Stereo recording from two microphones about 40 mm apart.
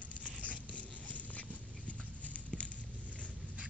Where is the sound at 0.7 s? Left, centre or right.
Left.